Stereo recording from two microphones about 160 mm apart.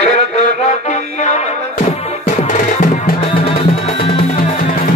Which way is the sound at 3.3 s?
35° left (ahead or behind).